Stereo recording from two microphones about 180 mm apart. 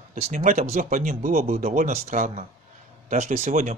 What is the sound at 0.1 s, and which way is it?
Speech, 45° right (ahead or behind).